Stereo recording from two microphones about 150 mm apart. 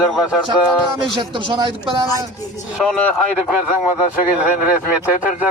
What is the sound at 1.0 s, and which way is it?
Speech, 30° right (ahead or behind).